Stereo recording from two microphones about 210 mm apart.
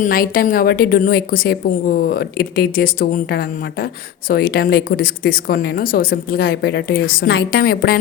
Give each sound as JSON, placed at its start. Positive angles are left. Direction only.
{"t": 0.0, "sound": "a woman's voice", "side_deg": 45}